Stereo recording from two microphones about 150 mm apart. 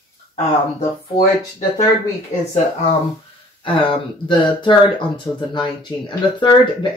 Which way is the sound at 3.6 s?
35° left (ahead or behind).